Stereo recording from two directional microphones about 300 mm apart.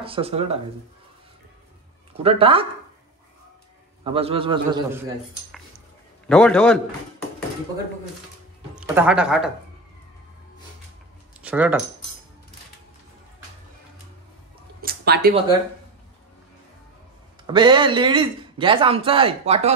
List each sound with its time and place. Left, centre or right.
0.0 s speech: centre
2.2 s a man's voice: centre
4.0 s a man's voice: centre
6.2 s a man's voice: centre
8.7 s speech: centre
11.4 s speech: centre
14.8 s a sound: right
17.5 s a man's voice: centre